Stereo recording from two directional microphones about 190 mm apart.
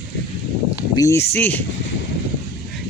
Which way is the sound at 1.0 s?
15° left (ahead or behind).